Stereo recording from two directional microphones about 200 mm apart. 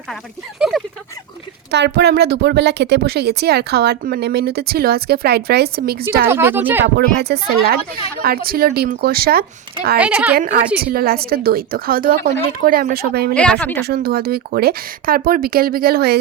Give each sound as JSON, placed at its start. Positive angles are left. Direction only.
{"t": 1.7, "sound": "speech", "side_deg": -55}
{"t": 6.2, "sound": "speech", "side_deg": -10}
{"t": 6.8, "sound": "speech", "side_deg": -55}
{"t": 10.0, "sound": "speech", "side_deg": -10}
{"t": 10.3, "sound": "speech", "side_deg": -50}
{"t": 13.3, "sound": "a woman's voice", "side_deg": 5}
{"t": 13.8, "sound": "speech", "side_deg": -50}